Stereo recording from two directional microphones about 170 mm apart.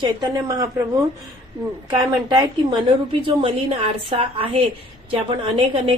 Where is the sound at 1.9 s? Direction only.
20° right (ahead or behind).